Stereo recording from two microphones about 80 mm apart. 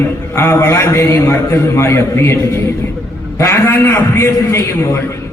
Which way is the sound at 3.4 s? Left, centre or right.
Left.